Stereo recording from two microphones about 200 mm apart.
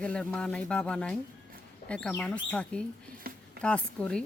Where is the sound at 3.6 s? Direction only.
5° left (ahead or behind).